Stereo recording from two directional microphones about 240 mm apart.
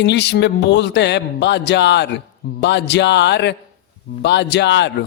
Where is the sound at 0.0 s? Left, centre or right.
Left.